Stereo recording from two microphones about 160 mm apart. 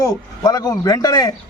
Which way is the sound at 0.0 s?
20° left (ahead or behind).